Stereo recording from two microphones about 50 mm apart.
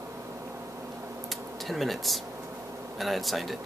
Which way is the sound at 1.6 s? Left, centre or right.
Centre.